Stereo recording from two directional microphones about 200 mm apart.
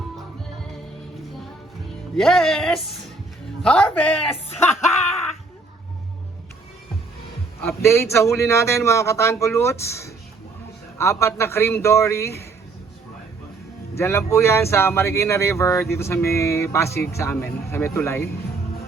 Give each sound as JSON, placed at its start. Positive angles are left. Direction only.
{"t": 2.1, "sound": "speech", "side_deg": 0}
{"t": 7.6, "sound": "speech", "side_deg": 10}
{"t": 13.9, "sound": "speech", "side_deg": 15}